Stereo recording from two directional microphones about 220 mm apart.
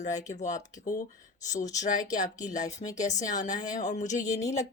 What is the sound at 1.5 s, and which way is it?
A woman's voice, 35° left (ahead or behind).